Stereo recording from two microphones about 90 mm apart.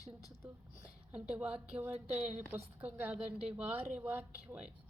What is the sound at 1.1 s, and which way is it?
A woman's voice, 10° right (ahead or behind).